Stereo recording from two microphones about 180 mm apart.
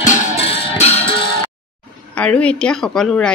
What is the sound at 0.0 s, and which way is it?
Music, 40° left (ahead or behind).